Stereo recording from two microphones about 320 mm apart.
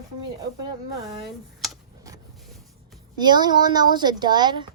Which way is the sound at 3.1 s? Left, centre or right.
Centre.